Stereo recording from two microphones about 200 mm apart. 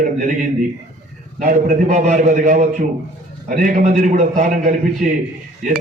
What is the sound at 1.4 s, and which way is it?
A man's voice, 40° right (ahead or behind).